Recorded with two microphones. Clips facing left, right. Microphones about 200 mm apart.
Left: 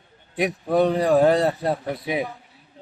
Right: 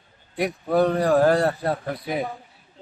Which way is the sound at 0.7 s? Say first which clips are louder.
Even; centre (ahead or behind).